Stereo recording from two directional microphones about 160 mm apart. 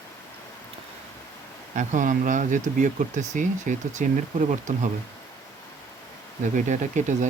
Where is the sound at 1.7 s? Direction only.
50° right (ahead or behind).